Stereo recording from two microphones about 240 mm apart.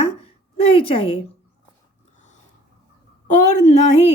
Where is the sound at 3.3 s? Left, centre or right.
Left.